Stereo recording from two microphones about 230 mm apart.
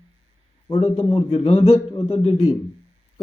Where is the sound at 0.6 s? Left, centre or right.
Left.